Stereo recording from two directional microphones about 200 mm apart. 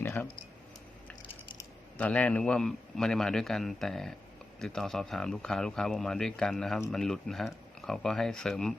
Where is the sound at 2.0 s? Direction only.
5° left (ahead or behind).